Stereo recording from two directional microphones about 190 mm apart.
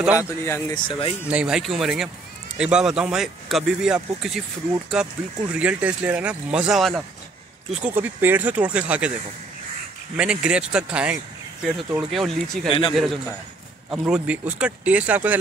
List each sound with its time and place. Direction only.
0.0 s speech: 10° right (ahead or behind)
0.5 s speech: 15° left (ahead or behind)
0.8 s speech: 30° left (ahead or behind)
1.3 s speech: 5° right (ahead or behind)
10.1 s speech: 5° right (ahead or behind)